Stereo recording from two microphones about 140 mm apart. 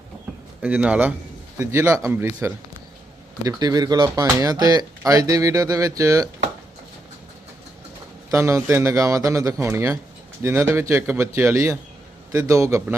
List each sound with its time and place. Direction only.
0.6 s a man's voice: 10° right (ahead or behind)
8.3 s speech: 20° right (ahead or behind)